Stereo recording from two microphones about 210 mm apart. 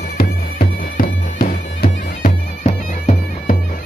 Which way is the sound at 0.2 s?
45° left (ahead or behind).